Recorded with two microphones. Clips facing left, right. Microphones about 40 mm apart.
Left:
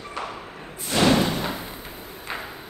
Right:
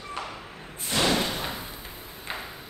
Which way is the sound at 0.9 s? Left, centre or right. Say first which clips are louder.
Left 5 dB; left.